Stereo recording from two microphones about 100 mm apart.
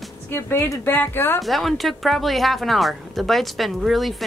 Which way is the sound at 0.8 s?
20° left (ahead or behind).